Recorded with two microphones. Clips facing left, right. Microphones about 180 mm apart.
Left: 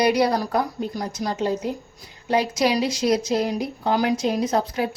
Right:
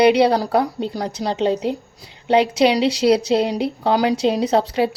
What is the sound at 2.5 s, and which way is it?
Speech, 70° right (ahead or behind).